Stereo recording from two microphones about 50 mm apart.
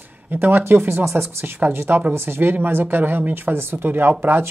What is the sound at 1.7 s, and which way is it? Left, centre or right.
Speech, right.